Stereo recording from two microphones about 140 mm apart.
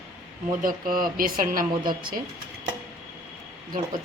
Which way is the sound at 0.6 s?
85° right.